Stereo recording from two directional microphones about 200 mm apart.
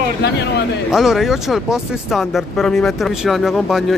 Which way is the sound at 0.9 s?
Centre (ahead or behind).